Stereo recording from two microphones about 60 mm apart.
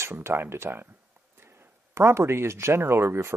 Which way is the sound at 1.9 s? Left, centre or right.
Right.